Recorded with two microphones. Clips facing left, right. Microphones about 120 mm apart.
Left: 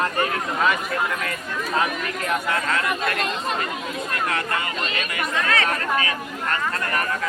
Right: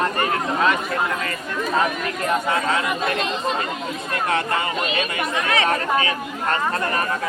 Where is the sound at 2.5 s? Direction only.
15° right (ahead or behind).